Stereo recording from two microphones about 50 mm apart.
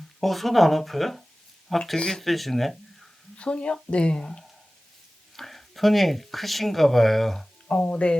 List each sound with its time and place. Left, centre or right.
0.2 s speech: centre
3.3 s speech: left
5.4 s speech: centre
7.7 s speech: left